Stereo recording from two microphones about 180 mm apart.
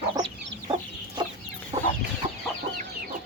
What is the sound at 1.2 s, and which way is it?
Chicken, 25° right (ahead or behind).